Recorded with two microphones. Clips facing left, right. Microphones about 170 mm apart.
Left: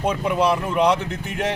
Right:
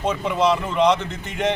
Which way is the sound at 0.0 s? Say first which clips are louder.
Even; 10° left (ahead or behind).